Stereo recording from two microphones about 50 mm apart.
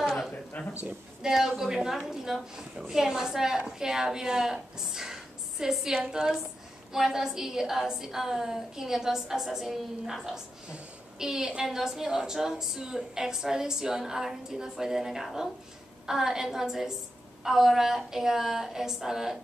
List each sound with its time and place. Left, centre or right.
0.5 s speech: left
1.2 s a woman's voice: centre